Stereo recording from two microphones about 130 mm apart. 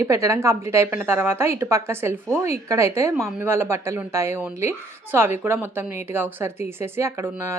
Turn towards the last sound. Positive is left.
turn(degrees=-20)  # may be behind; listen again after turning